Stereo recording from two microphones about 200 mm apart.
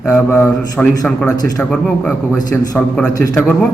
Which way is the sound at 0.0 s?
5° left (ahead or behind).